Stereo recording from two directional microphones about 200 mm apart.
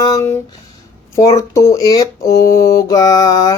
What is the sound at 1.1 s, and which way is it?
Speech, 15° left (ahead or behind).